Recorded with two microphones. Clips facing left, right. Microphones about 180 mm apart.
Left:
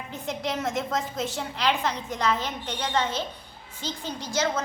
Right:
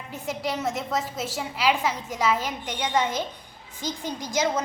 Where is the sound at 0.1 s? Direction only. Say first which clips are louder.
Right 1 dB; 5° right (ahead or behind).